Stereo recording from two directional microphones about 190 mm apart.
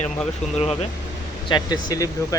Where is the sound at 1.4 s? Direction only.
20° left (ahead or behind).